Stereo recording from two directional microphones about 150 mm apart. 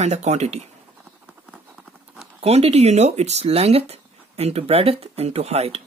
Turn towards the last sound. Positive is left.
turn(degrees=-45)  # may be behind; listen again after turning